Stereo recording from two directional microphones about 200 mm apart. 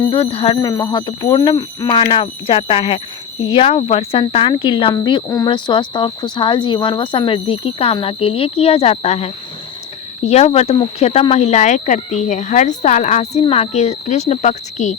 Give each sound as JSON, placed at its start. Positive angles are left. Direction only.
{"t": 0.1, "sound": "speech", "side_deg": 30}